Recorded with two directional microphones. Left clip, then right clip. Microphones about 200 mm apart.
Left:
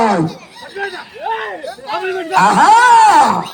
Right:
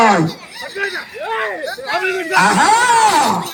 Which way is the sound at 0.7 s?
25° left (ahead or behind).